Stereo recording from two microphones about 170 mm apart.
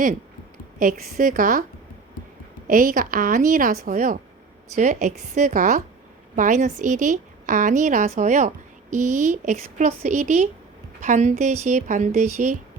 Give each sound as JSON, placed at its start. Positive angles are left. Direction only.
{"t": 0.8, "sound": "a woman's voice", "side_deg": -55}
{"t": 2.6, "sound": "a woman's voice", "side_deg": -55}